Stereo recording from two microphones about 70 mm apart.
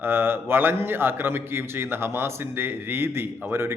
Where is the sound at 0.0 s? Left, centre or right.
Right.